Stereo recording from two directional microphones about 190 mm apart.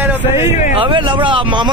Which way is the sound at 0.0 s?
10° right (ahead or behind).